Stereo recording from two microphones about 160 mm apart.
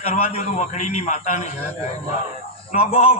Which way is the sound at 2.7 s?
35° left (ahead or behind).